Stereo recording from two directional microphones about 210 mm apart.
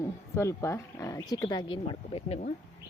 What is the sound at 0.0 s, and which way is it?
Speech, 15° left (ahead or behind).